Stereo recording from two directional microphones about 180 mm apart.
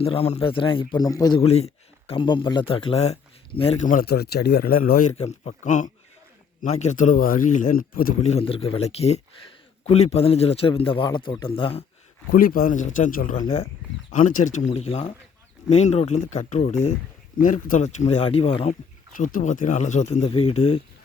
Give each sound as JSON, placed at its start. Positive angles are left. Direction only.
{"t": 0.0, "sound": "a man's voice", "side_deg": 35}
{"t": 1.4, "sound": "speech", "side_deg": 35}
{"t": 3.8, "sound": "speech", "side_deg": 55}
{"t": 5.1, "sound": "a man's voice", "side_deg": 35}
{"t": 8.3, "sound": "speech", "side_deg": 35}
{"t": 12.3, "sound": "a man's voice", "side_deg": 50}
{"t": 19.1, "sound": "speech", "side_deg": 45}